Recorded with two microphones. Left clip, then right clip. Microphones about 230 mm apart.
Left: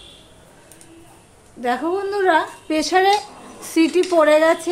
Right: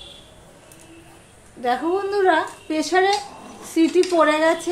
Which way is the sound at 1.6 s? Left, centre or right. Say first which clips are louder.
Even; centre.